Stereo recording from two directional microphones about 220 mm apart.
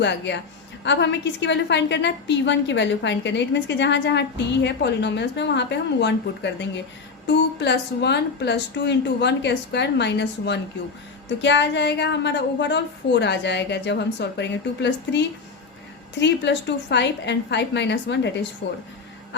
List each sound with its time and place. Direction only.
0.0 s a woman's voice: 50° left (ahead or behind)
16.2 s a woman's voice: 50° left (ahead or behind)